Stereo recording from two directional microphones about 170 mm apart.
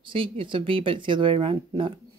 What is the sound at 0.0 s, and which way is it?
Speech, 30° right (ahead or behind).